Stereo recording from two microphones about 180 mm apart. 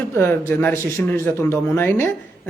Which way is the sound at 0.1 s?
15° left (ahead or behind).